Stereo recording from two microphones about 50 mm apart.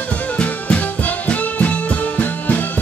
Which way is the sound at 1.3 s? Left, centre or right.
Left.